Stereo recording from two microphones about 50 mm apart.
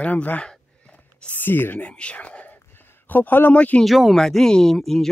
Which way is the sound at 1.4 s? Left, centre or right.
Left.